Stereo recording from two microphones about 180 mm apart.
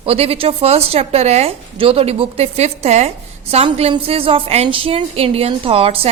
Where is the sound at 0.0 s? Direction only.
35° right (ahead or behind).